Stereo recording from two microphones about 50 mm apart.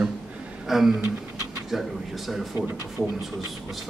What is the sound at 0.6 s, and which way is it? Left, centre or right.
Speech, centre.